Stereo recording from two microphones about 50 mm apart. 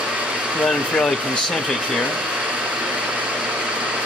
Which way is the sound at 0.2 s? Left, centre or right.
Right.